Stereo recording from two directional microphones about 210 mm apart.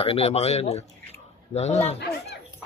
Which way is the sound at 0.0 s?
30° left (ahead or behind).